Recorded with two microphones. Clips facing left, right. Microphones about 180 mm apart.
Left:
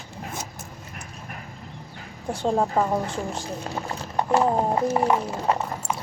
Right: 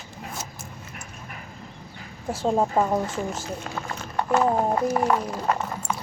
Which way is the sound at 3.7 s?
25° left (ahead or behind).